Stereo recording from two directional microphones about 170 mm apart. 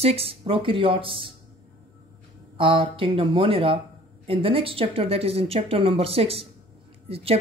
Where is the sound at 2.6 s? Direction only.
30° right (ahead or behind).